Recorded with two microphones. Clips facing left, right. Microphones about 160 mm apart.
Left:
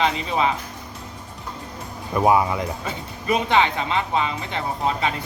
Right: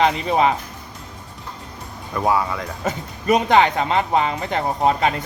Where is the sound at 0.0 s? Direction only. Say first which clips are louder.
Right 4 dB; 50° right (ahead or behind).